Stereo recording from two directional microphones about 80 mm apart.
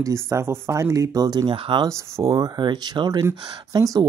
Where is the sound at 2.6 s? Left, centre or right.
Right.